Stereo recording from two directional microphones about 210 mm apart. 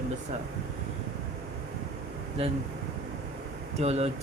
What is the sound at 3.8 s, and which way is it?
Speech, 30° right (ahead or behind).